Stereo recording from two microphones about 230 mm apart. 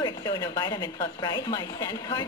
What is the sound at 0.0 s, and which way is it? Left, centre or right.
A woman's voice, centre.